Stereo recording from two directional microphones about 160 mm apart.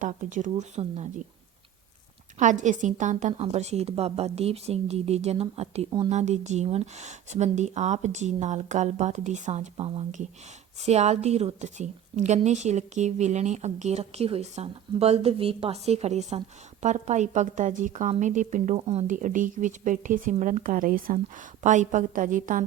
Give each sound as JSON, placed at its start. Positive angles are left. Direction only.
{"t": 0.0, "sound": "a woman's voice", "side_deg": -50}
{"t": 2.4, "sound": "a woman's voice", "side_deg": -50}